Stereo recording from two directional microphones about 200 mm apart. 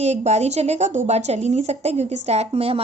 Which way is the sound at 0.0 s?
35° right (ahead or behind).